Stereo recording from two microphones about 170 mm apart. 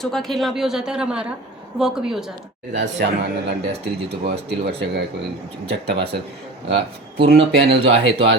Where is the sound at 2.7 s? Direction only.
90° right.